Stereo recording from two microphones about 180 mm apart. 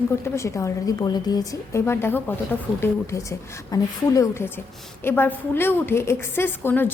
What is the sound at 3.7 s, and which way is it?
A woman's voice, 15° left (ahead or behind).